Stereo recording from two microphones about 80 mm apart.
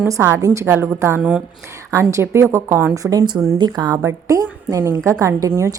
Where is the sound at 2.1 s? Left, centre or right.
Right.